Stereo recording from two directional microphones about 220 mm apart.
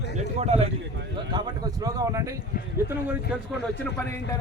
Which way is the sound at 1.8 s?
15° right (ahead or behind).